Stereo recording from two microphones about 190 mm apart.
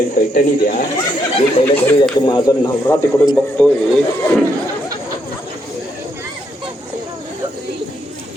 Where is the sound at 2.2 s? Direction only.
20° left (ahead or behind).